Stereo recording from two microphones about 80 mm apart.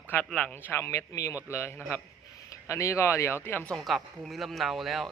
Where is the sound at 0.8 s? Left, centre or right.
Left.